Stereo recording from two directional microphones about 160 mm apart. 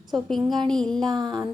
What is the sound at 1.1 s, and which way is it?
Speech, 25° right (ahead or behind).